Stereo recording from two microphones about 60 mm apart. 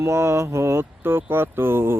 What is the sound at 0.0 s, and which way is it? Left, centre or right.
Speech, right.